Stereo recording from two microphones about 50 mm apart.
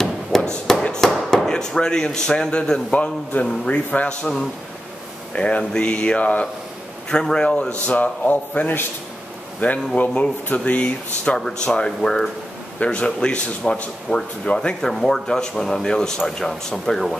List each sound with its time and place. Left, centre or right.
0.3 s tap: centre
1.3 s speech: centre; by 4.3 s left
5.3 s a man's voice: left
7.1 s speech: centre
7.8 s a man's voice: left
11.3 s speech: centre
12.7 s a man's voice: left
14.8 s speech: centre